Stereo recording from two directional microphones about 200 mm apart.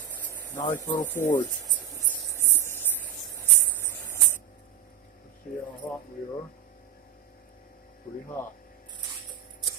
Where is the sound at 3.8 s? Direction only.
10° left (ahead or behind).